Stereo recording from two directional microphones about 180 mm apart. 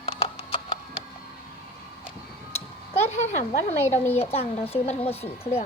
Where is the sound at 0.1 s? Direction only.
20° left (ahead or behind).